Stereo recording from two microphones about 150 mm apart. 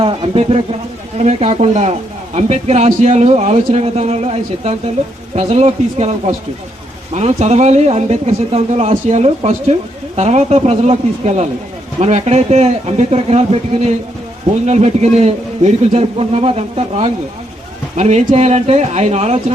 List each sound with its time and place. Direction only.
0.0 s speech: 45° right (ahead or behind)